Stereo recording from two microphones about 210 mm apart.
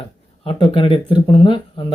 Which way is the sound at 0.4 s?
25° left (ahead or behind).